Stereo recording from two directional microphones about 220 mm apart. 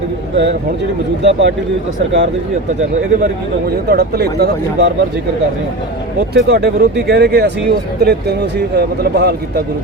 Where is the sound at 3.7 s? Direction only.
45° right (ahead or behind).